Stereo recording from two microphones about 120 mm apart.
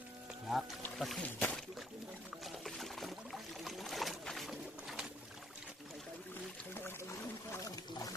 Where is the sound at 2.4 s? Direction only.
Centre (ahead or behind).